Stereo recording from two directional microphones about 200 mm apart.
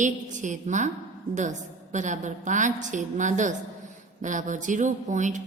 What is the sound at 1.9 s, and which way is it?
A woman's voice, 40° right (ahead or behind).